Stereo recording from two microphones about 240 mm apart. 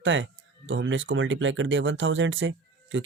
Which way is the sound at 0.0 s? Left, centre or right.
Right.